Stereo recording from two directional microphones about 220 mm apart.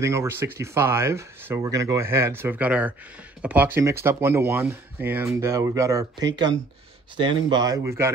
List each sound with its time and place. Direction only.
0.0 s speech: 15° right (ahead or behind)
7.2 s speech: 20° right (ahead or behind)